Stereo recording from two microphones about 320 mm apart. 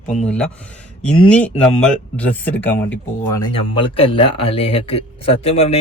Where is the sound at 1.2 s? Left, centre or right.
Centre.